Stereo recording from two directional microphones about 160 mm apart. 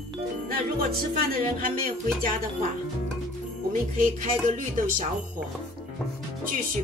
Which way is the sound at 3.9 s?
60° right (ahead or behind).